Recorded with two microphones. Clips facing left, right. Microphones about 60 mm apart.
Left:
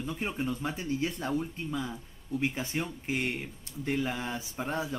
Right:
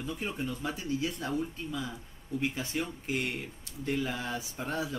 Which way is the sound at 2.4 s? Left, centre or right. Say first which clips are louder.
Left 1 dB; left.